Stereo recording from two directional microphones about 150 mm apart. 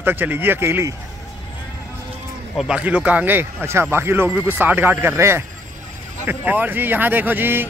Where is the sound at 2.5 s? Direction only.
5° right (ahead or behind).